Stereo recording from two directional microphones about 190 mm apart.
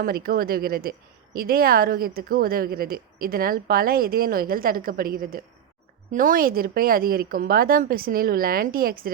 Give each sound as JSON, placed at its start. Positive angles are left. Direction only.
{"t": 0.0, "sound": "a woman's voice", "side_deg": -50}